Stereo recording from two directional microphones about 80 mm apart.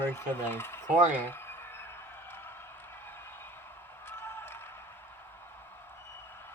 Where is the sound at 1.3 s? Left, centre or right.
Left.